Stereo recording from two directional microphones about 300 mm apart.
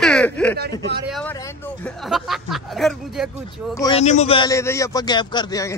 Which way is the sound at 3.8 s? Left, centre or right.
Centre.